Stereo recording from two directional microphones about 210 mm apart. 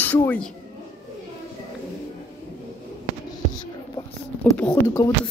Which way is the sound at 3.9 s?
15° left (ahead or behind).